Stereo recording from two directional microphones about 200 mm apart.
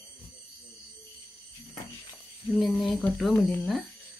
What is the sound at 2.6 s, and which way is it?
Speech, centre (ahead or behind).